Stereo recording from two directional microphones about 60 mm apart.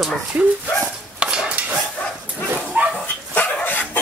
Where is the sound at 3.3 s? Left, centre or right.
Left.